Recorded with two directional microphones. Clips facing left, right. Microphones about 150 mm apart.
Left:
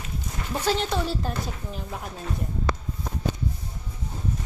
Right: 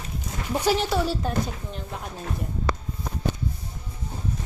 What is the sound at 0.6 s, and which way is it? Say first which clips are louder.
A woman's voice: right 2 dB; 5° right (ahead or behind).